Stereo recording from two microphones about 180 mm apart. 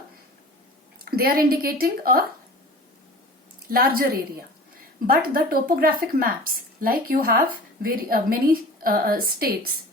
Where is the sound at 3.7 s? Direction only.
55° right (ahead or behind).